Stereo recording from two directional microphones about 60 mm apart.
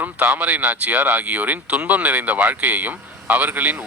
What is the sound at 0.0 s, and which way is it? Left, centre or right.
Speech, right.